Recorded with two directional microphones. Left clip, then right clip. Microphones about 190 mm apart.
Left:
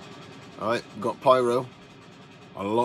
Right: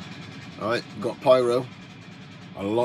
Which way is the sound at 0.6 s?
15° left (ahead or behind).